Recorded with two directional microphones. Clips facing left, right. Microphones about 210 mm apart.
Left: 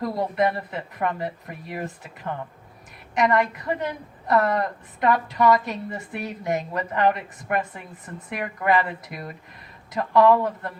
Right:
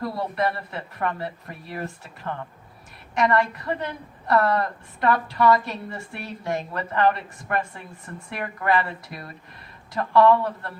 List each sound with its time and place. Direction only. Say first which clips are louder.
0.0 s a woman's voice: left 3 dB; 20° left (ahead or behind)
3.2 s a woman's voice: left 1 dB; 20° left (ahead or behind)